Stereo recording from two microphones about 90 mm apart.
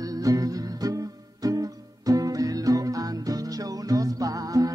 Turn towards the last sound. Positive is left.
turn(degrees=-40)  # may be behind; listen again after turning